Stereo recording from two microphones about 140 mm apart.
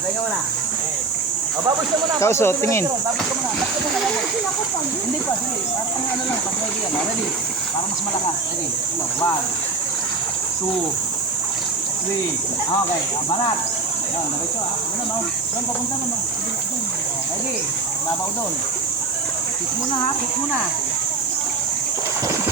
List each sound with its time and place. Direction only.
2.2 s speech: 20° left (ahead or behind)